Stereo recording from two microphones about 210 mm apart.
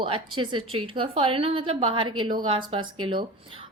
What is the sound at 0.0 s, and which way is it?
A woman's voice, 25° right (ahead or behind).